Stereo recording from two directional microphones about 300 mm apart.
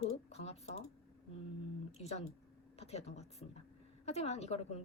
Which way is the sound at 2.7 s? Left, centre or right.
Left.